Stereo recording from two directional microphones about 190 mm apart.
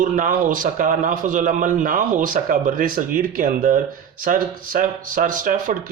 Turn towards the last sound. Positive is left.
turn(degrees=-45)  # may be behind; listen again after turning